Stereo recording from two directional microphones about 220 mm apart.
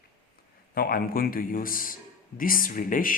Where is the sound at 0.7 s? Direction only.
40° left (ahead or behind).